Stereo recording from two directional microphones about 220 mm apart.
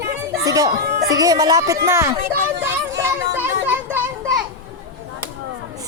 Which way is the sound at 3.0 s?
10° right (ahead or behind).